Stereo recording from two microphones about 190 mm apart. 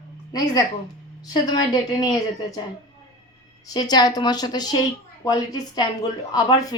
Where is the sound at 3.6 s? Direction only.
20° left (ahead or behind).